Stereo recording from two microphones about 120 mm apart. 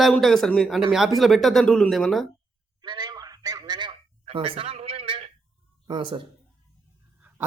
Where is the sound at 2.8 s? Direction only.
40° right (ahead or behind).